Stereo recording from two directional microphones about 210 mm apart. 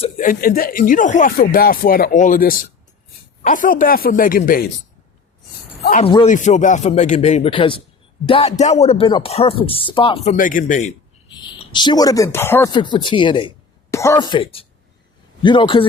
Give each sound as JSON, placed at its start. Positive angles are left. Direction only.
{"t": 0.0, "sound": "speech", "side_deg": 40}
{"t": 6.0, "sound": "speech", "side_deg": 25}
{"t": 6.2, "sound": "speech", "side_deg": 35}
{"t": 10.2, "sound": "speech", "side_deg": 40}
{"t": 11.3, "sound": "speech", "side_deg": 20}
{"t": 13.9, "sound": "speech", "side_deg": 15}